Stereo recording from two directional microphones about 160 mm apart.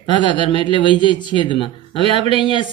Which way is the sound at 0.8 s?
30° left (ahead or behind).